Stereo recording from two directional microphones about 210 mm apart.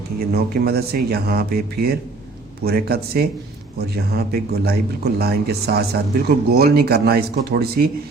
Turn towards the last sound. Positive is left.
turn(degrees=-50)  # may be behind; listen again after turning